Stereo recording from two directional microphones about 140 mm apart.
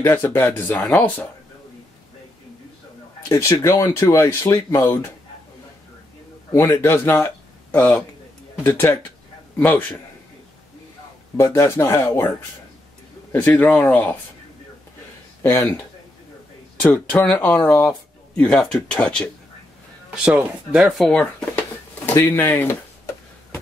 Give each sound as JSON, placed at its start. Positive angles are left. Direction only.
{"t": 0.0, "sound": "speech", "side_deg": 15}
{"t": 3.3, "sound": "speech", "side_deg": 20}
{"t": 6.8, "sound": "speech", "side_deg": 20}
{"t": 11.3, "sound": "speech", "side_deg": 20}
{"t": 15.4, "sound": "speech", "side_deg": 20}
{"t": 16.8, "sound": "speech", "side_deg": 10}
{"t": 20.2, "sound": "speech", "side_deg": -5}
{"t": 22.0, "sound": "speech", "side_deg": 15}